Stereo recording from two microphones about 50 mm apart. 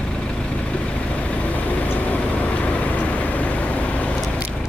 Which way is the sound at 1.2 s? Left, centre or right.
Left.